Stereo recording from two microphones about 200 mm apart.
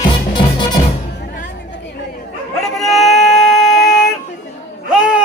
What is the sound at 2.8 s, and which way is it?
Music, centre (ahead or behind).